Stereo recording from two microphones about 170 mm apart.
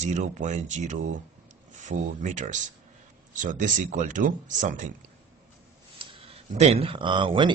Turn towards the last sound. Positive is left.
turn(degrees=-30)  # may be behind; listen again after turning